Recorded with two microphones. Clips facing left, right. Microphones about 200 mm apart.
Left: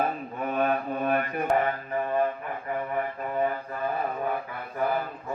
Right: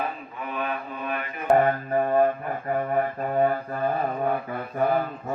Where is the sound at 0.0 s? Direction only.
45° left (ahead or behind).